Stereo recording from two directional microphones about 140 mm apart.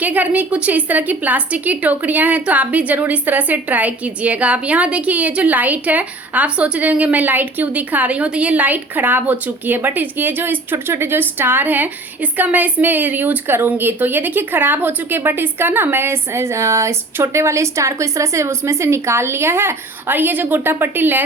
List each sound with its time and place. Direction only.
0.0 s a woman's voice: 10° right (ahead or behind)